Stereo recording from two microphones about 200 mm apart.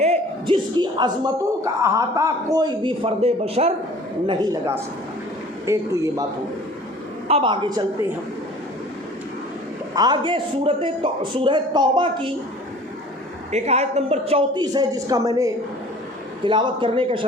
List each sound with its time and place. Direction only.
0.0 s speech: 30° right (ahead or behind)
4.3 s a man's voice: 15° right (ahead or behind)
7.3 s speech: 25° right (ahead or behind)
9.9 s speech: 20° right (ahead or behind)
13.5 s speech: 35° right (ahead or behind)